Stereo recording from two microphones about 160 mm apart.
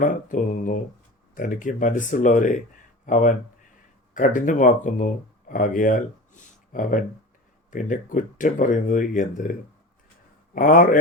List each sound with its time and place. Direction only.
0.0 s speech: 55° left (ahead or behind)
10.5 s speech: 60° left (ahead or behind)